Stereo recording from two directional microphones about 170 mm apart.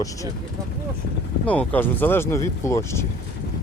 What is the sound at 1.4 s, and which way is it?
Speech, 10° left (ahead or behind).